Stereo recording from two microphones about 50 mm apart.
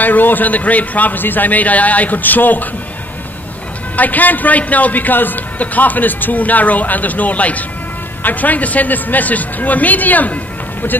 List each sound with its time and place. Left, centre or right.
0.0 s a man's voice: left
3.9 s a man's voice: left